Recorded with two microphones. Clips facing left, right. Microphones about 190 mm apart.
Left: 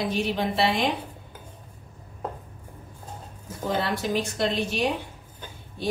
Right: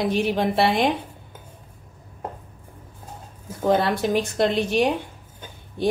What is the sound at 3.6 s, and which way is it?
A woman's voice, 55° right (ahead or behind).